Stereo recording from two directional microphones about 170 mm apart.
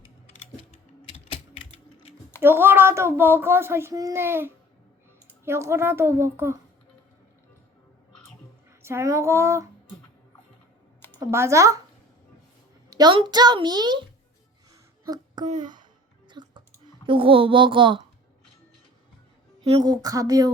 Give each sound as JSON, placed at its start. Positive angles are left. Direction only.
{"t": 2.4, "sound": "speech", "side_deg": -15}
{"t": 8.8, "sound": "speech", "side_deg": -15}
{"t": 11.2, "sound": "speech", "side_deg": -15}
{"t": 12.9, "sound": "a woman's voice", "side_deg": -25}
{"t": 15.0, "sound": "a sound", "side_deg": -20}
{"t": 15.4, "sound": "speech", "side_deg": -45}
{"t": 16.3, "sound": "music", "side_deg": -25}
{"t": 17.1, "sound": "a child's voice", "side_deg": -30}
{"t": 19.8, "sound": "a woman's voice", "side_deg": -20}